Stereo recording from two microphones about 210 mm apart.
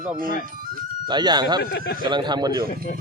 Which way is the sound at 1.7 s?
50° left (ahead or behind).